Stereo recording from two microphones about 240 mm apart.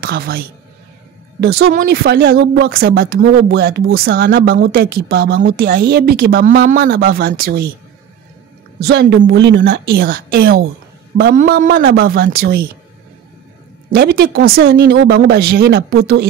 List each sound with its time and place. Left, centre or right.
0.0 s speech: right
1.8 s speech: right
8.7 s speech: right
13.8 s speech: right